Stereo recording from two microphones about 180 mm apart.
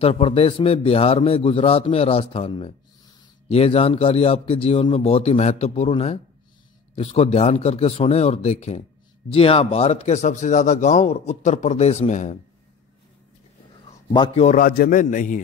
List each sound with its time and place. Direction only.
0.0 s a man's voice: 35° left (ahead or behind)
13.8 s a sound: 25° left (ahead or behind)
14.4 s a man's voice: 45° left (ahead or behind)